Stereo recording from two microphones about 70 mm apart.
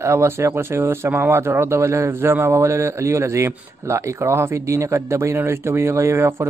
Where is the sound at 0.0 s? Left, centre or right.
Right.